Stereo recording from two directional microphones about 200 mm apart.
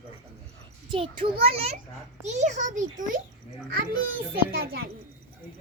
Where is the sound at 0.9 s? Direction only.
25° right (ahead or behind).